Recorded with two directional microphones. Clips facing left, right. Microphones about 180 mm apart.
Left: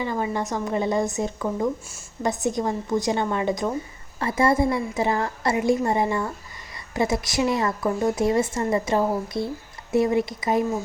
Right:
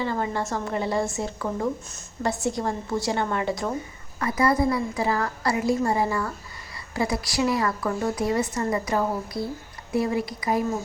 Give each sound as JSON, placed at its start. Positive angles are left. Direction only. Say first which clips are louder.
{"t": 0.0, "sound": "a woman's voice", "louder": "left 1 dB", "side_deg": 15}